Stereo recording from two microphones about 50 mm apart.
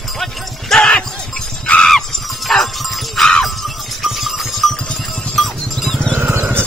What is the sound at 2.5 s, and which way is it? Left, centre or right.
Music, centre.